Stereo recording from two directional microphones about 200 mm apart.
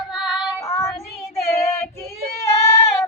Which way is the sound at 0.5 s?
15° left (ahead or behind).